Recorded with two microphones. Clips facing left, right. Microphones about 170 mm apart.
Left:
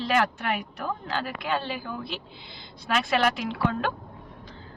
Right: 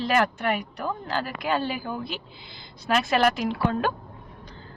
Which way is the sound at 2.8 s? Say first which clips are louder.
Right 2 dB; centre (ahead or behind).